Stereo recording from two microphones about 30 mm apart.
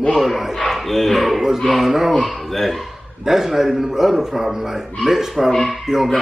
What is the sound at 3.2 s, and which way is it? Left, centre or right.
A man's voice, centre.